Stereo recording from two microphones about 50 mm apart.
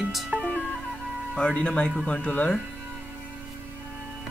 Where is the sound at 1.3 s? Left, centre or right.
Centre.